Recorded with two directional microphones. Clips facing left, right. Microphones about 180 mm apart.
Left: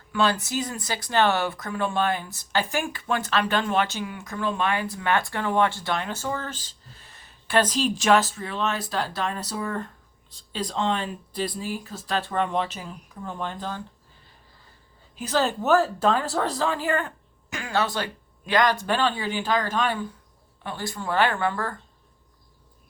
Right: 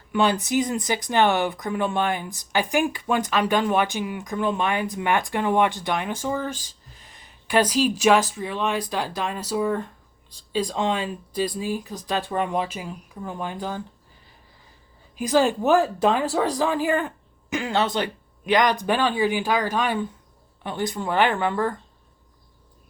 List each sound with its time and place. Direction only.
0.1 s speech: 20° right (ahead or behind)
15.1 s speech: 15° right (ahead or behind)